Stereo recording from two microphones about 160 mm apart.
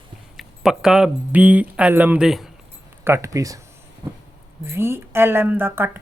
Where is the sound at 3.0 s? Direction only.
15° right (ahead or behind).